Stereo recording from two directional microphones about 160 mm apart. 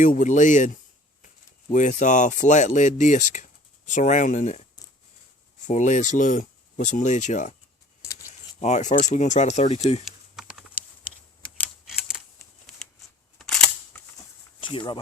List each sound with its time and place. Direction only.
0.0 s speech: 50° left (ahead or behind)
5.6 s speech: 50° left (ahead or behind)
8.6 s speech: 45° left (ahead or behind)
10.0 s typing: centre (ahead or behind)
12.1 s a sound: centre (ahead or behind)
13.4 s camera: 5° left (ahead or behind)
14.6 s speech: 30° left (ahead or behind)